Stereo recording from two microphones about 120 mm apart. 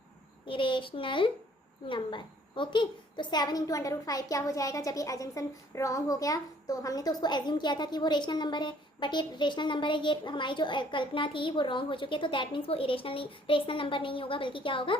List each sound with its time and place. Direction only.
0.4 s a woman's voice: 45° left (ahead or behind)